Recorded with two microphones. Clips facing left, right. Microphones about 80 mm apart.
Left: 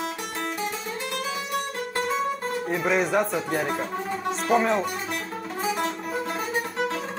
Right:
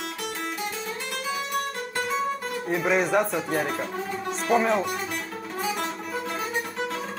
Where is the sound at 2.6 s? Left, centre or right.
Centre.